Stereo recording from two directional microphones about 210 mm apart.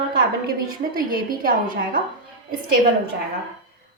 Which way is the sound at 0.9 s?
45° right (ahead or behind).